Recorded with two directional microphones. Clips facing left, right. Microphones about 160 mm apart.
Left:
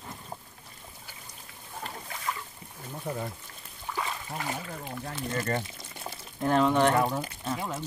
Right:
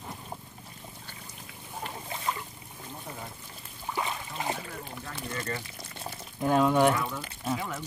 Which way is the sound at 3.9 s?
20° right (ahead or behind).